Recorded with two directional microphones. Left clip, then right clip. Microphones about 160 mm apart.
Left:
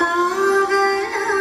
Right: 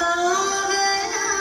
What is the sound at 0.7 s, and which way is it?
Music, 35° left (ahead or behind).